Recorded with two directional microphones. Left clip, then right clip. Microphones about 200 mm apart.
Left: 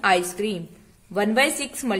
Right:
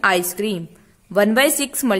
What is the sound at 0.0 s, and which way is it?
A woman's voice, 45° right (ahead or behind).